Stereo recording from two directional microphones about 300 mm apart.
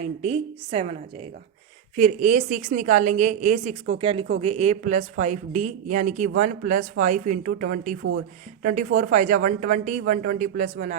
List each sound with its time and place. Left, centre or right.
0.0 s a woman's voice: right